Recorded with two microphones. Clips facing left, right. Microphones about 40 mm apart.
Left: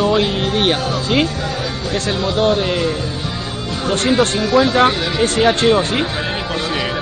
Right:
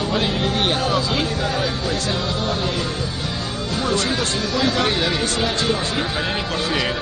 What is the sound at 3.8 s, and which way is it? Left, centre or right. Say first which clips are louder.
Speech: left 7 dB; left.